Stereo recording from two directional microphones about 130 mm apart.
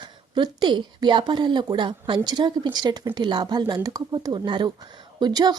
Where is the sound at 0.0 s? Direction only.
35° right (ahead or behind).